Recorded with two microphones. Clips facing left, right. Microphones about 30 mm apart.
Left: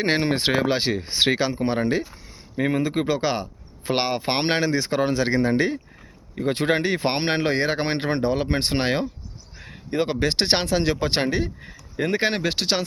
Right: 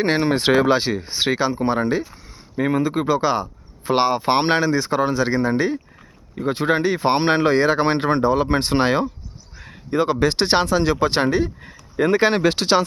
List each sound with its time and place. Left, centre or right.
0.0 s speech: left
1.0 s speech: left
1.3 s speech: left
2.6 s speech: centre
3.1 s speech: left
5.1 s speech: left
6.4 s speech: left
7.3 s speech: left
11.0 s speech: left
11.6 s a sound: centre
12.5 s speech: centre